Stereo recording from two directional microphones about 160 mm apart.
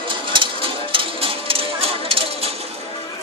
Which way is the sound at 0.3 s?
30° right (ahead or behind).